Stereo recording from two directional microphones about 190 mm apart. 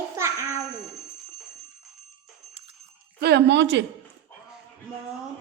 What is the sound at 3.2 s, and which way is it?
Speech, 65° right (ahead or behind).